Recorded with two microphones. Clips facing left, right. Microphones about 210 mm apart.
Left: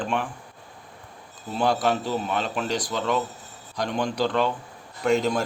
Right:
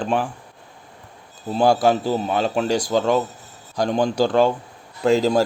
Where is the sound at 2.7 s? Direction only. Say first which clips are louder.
Right 6 dB; 30° right (ahead or behind); by 4.5 s 45° right (ahead or behind).